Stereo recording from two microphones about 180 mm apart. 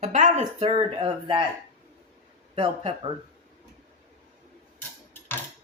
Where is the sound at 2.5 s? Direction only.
30° right (ahead or behind).